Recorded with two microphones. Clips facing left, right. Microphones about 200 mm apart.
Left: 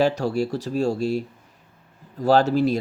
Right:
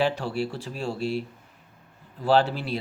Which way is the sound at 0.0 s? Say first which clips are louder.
Left 5 dB; 40° left (ahead or behind).